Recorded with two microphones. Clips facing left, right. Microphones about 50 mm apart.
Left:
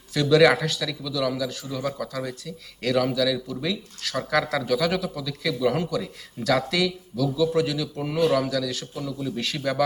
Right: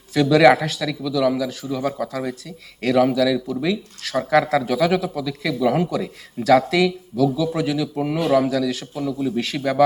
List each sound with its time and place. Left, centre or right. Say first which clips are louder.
0.1 s a man's voice: right 4 dB; right